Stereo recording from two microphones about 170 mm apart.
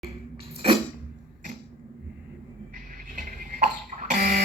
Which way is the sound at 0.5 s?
35° right (ahead or behind).